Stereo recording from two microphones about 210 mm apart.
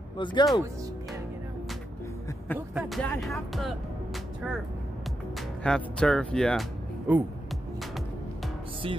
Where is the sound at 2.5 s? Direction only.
5° right (ahead or behind).